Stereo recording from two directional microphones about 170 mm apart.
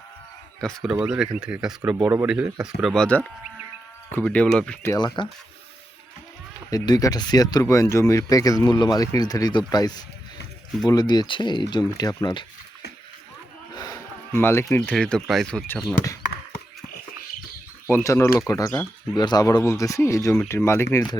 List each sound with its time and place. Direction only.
0.6 s a man's voice: centre (ahead or behind)
4.9 s speech: 25° left (ahead or behind)
6.7 s speech: 20° left (ahead or behind)
13.7 s speech: 20° left (ahead or behind)
17.9 s speech: 15° left (ahead or behind)